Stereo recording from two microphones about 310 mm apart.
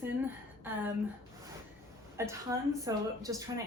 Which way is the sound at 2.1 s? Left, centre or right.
Centre.